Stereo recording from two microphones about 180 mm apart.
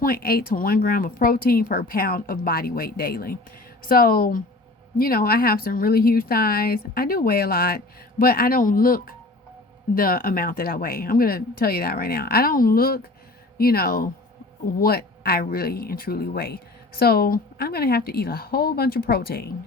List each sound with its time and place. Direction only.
0.0 s speech: 55° left (ahead or behind)